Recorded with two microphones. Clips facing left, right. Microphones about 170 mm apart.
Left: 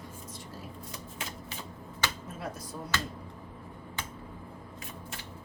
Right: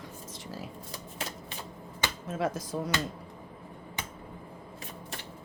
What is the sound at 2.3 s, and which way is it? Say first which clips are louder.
Speech: right 8 dB; 90° right.